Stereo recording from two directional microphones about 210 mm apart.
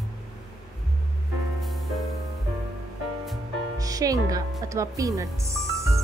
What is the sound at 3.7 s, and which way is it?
A woman's voice, 15° right (ahead or behind).